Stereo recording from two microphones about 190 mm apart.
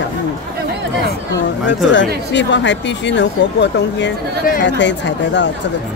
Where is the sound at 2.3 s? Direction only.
70° left (ahead or behind).